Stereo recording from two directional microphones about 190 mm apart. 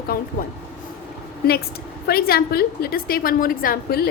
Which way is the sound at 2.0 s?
55° left (ahead or behind).